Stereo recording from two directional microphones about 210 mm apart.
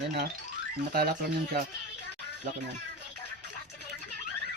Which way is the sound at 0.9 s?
45° right (ahead or behind).